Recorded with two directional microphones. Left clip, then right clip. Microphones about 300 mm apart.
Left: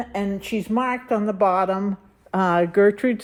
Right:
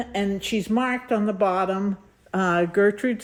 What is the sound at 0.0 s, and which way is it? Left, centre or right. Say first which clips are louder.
Speech: right 1 dB; centre.